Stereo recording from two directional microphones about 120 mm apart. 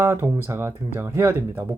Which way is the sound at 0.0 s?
20° right (ahead or behind).